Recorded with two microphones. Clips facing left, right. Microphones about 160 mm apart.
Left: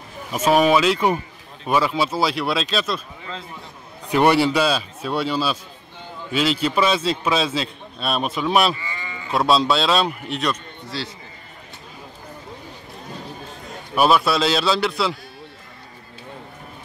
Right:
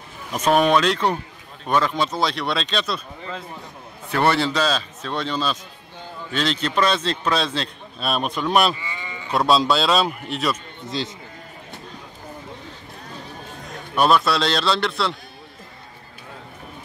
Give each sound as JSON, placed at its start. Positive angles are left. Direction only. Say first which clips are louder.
{"t": 0.3, "sound": "a man's voice", "louder": "left 1 dB", "side_deg": 5}
{"t": 4.1, "sound": "a man's voice", "louder": "left 4 dB", "side_deg": 15}
{"t": 8.9, "sound": "sheep", "louder": "even", "side_deg": -20}
{"t": 9.3, "sound": "a man's voice", "louder": "even", "side_deg": 0}
{"t": 10.9, "sound": "a man's voice", "louder": "right 3 dB", "side_deg": -20}
{"t": 13.9, "sound": "a man's voice", "louder": "left 1 dB", "side_deg": 5}